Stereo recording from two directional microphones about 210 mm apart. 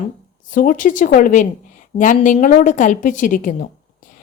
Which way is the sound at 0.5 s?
40° left (ahead or behind).